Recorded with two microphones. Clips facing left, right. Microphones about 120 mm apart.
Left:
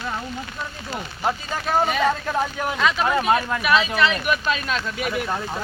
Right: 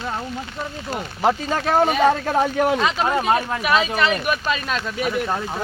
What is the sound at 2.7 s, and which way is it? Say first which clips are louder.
Speech: right 1 dB; 25° right (ahead or behind).